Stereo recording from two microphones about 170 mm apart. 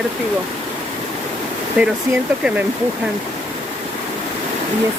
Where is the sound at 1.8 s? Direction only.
5° right (ahead or behind).